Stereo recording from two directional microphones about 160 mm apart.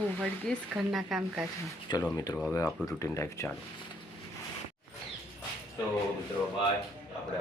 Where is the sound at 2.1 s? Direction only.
25° left (ahead or behind).